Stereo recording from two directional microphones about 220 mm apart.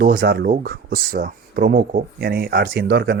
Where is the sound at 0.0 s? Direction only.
45° right (ahead or behind).